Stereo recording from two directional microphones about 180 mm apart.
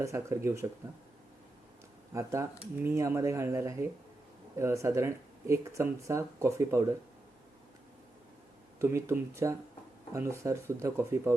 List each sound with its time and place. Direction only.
0.0 s speech: 15° right (ahead or behind)
2.1 s speech: 15° right (ahead or behind)
8.8 s speech: 15° right (ahead or behind)